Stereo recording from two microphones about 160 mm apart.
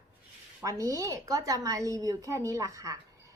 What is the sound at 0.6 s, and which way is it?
A woman's voice, 20° right (ahead or behind).